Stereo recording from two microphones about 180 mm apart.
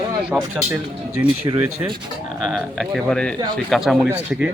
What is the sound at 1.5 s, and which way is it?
Speech, 25° right (ahead or behind).